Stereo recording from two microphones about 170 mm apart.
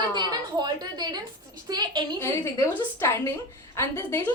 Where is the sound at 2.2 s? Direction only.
15° left (ahead or behind).